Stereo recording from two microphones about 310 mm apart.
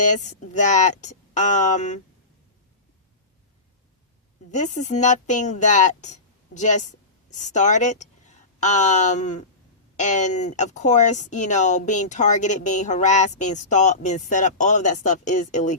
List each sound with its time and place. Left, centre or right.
0.0 s speech: left
4.5 s speech: left